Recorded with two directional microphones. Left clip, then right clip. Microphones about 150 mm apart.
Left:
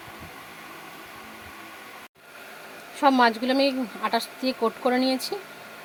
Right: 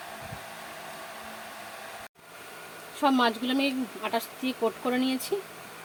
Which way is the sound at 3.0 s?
35° left (ahead or behind).